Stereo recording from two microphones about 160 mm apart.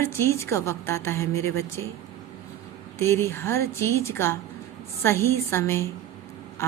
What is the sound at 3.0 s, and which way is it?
Speech, 15° left (ahead or behind).